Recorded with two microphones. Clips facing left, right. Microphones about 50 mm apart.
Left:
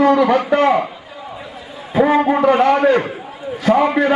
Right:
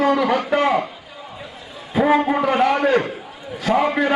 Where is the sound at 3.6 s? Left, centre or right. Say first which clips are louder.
Left 4 dB; centre.